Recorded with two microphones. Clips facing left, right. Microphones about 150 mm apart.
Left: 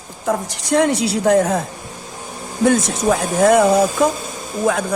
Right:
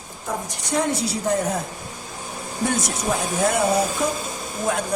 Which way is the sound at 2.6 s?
90° left.